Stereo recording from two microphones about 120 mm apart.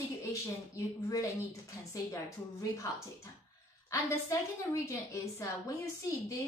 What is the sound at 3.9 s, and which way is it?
A woman's voice, 25° left (ahead or behind).